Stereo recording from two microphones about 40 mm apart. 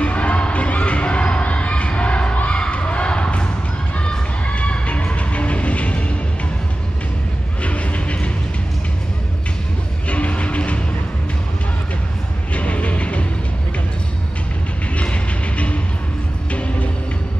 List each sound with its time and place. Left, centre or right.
0.0 s basketball bounce: left
4.0 s music: left
7.6 s vehicle: left
10.0 s music: left
12.5 s music: left
15.0 s music: left